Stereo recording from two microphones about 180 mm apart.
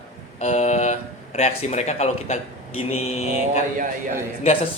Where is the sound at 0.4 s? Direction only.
40° left (ahead or behind).